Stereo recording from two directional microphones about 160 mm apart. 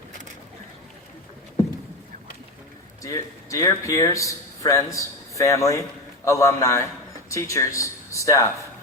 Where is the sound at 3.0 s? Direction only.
20° left (ahead or behind).